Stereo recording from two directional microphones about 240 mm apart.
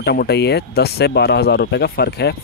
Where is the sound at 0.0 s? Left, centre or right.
Left.